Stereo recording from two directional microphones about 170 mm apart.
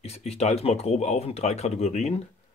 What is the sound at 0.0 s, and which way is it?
Speech, 40° left (ahead or behind).